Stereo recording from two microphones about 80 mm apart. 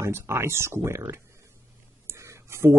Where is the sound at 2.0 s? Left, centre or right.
Right.